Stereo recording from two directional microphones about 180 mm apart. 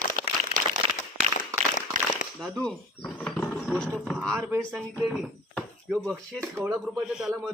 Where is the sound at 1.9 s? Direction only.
45° right (ahead or behind).